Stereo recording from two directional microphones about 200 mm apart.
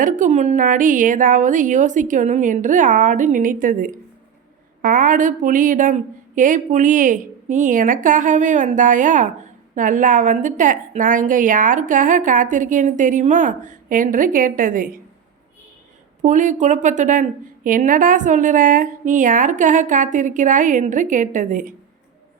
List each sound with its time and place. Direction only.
0.0 s a woman's voice: 35° right (ahead or behind)
16.2 s a woman's voice: 40° right (ahead or behind)